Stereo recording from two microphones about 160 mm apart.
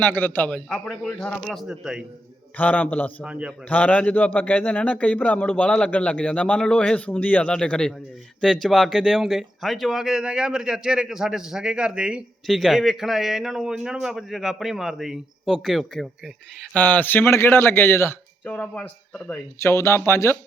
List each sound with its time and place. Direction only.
0.0 s speech: 10° left (ahead or behind)
2.6 s a man's voice: 10° left (ahead or behind)
3.2 s a man's voice: 5° right (ahead or behind)
3.7 s a man's voice: 10° left (ahead or behind)